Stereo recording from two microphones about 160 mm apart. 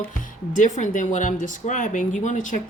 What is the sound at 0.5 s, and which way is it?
Speech, 50° left (ahead or behind).